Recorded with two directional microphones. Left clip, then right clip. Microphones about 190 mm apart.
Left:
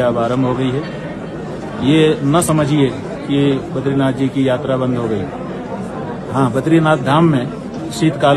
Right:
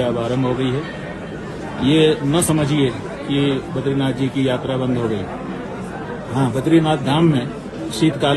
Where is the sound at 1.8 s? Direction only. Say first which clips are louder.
Left 2 dB; centre (ahead or behind).